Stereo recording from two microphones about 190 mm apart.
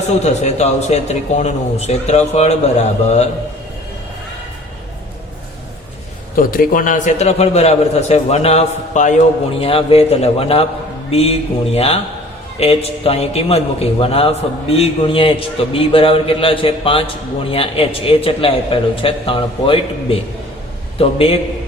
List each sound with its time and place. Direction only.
0.2 s speech: 35° left (ahead or behind)
6.3 s a man's voice: 50° left (ahead or behind); by 21.3 s 30° left (ahead or behind)